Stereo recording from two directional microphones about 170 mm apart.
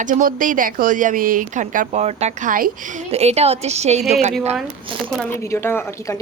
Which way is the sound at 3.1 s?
40° right (ahead or behind).